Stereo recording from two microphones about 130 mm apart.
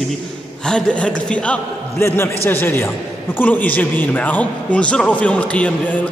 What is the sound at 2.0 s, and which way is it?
A man's voice, 20° left (ahead or behind).